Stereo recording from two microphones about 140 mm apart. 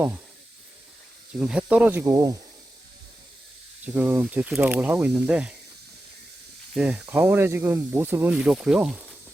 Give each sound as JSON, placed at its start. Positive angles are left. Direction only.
{"t": 1.4, "sound": "speech", "side_deg": -5}
{"t": 2.0, "sound": "speech", "side_deg": -25}
{"t": 3.8, "sound": "speech", "side_deg": -10}
{"t": 6.7, "sound": "speech", "side_deg": -10}